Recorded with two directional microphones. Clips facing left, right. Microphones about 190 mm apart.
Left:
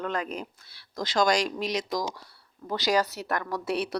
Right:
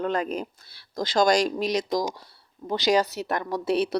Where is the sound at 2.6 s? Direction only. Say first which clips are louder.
Right 3 dB; 20° right (ahead or behind).